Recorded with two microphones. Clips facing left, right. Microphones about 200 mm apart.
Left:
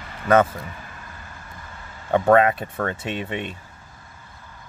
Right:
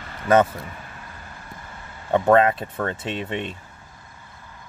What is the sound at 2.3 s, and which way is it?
Speech, 25° right (ahead or behind).